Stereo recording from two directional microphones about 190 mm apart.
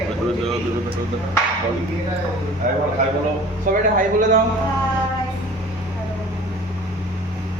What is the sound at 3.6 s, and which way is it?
Speech, 45° right (ahead or behind).